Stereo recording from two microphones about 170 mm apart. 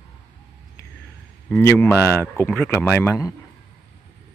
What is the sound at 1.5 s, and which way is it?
Speech, 10° left (ahead or behind).